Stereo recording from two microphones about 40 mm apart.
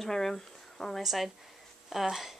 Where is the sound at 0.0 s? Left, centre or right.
Centre.